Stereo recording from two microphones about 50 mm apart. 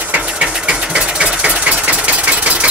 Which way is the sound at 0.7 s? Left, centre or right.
Centre.